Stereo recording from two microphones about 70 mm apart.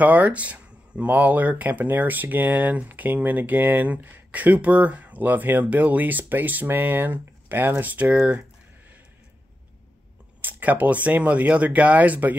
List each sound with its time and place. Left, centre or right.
0.0 s speech: right
10.4 s speech: right